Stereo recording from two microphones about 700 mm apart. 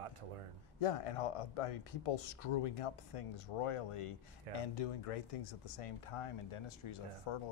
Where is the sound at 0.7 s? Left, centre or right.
Left.